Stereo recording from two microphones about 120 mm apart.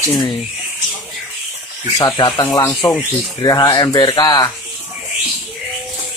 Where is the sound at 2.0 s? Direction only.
35° left (ahead or behind).